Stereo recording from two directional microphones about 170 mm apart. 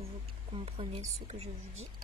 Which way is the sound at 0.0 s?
35° right (ahead or behind).